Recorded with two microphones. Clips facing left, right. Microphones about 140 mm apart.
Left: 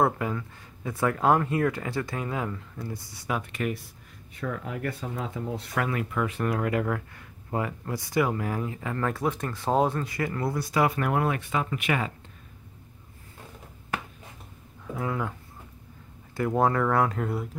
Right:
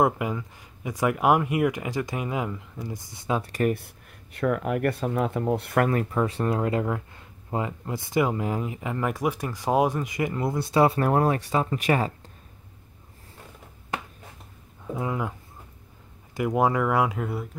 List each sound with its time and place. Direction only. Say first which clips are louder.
0.0 s speech: right 2 dB; 15° right (ahead or behind)
3.5 s speech: right 6 dB; 45° right (ahead or behind)
3.8 s speech: right 1 dB; 65° right (ahead or behind)
5.9 s speech: right 4 dB; 40° right (ahead or behind)
14.9 s speech: right 1 dB; 20° right (ahead or behind)
16.3 s speech: right 1 dB; 10° right (ahead or behind)